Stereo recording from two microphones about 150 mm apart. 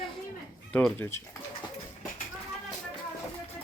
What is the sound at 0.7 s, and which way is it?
Speech, 10° left (ahead or behind).